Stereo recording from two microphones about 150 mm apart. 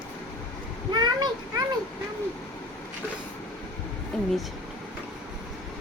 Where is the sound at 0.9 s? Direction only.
30° right (ahead or behind).